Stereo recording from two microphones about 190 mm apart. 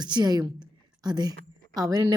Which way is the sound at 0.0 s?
20° right (ahead or behind).